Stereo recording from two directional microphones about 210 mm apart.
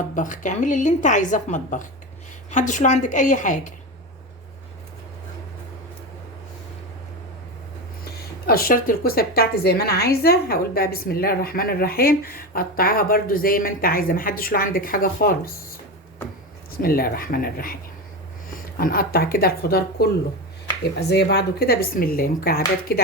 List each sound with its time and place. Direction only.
0.1 s a woman's voice: 40° left (ahead or behind)
8.4 s a woman's voice: 45° left (ahead or behind)
16.7 s a woman's voice: 45° left (ahead or behind)
18.8 s a woman's voice: 45° left (ahead or behind)
21.1 s a woman's voice: 50° left (ahead or behind)